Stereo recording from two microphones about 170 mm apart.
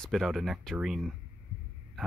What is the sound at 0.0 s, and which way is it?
Speech, centre (ahead or behind).